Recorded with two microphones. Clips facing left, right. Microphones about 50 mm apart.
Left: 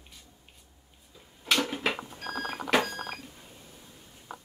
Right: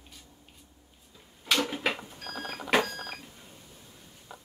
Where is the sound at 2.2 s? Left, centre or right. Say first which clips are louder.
Left 6 dB; left.